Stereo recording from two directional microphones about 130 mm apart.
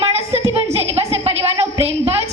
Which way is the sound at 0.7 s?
50° right (ahead or behind).